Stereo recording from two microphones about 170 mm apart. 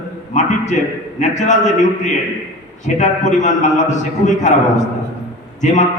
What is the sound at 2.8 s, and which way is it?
A man's voice, 45° left (ahead or behind).